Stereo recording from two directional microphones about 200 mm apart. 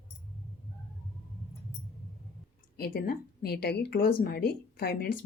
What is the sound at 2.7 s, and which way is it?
Speech, 50° left (ahead or behind).